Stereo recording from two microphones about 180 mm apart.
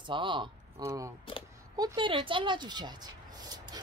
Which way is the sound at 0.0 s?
25° right (ahead or behind).